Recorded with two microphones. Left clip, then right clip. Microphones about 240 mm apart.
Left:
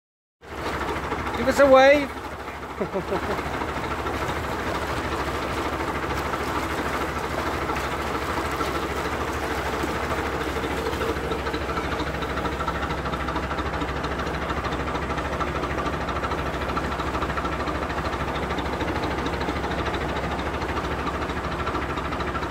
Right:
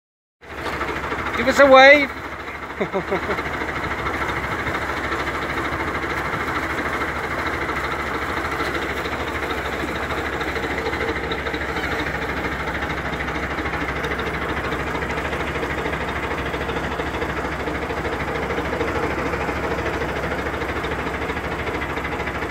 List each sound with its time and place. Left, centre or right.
1.5 s speech: centre